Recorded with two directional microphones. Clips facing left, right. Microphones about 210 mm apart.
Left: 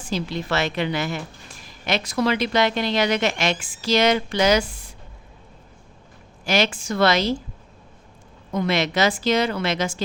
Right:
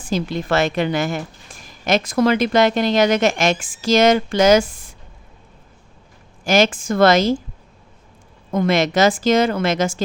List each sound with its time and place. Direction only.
0.1 s a woman's voice: 50° right (ahead or behind)
6.4 s a woman's voice: 45° right (ahead or behind)
8.5 s a woman's voice: 45° right (ahead or behind)